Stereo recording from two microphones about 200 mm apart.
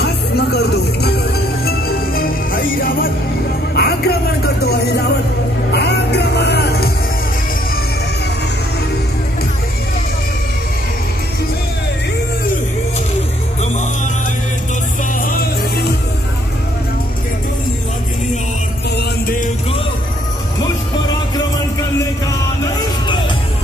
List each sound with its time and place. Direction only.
0.0 s music: 55° left (ahead or behind)
15.1 s music: 45° left (ahead or behind)
18.9 s music: 45° left (ahead or behind)